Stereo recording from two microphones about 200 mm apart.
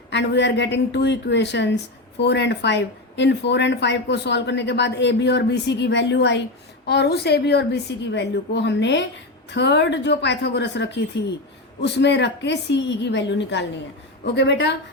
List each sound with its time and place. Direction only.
0.1 s a woman's voice: 60° left (ahead or behind)